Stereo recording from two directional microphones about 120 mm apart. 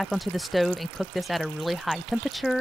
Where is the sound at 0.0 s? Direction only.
Centre (ahead or behind).